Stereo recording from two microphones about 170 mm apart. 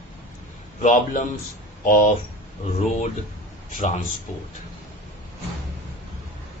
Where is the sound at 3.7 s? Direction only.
45° left (ahead or behind).